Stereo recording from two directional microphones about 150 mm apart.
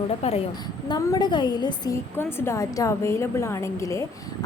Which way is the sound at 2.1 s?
15° left (ahead or behind).